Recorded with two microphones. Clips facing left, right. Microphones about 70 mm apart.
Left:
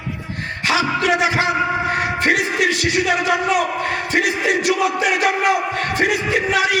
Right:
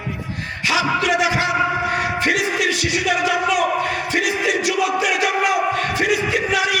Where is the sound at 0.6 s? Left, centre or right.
Left.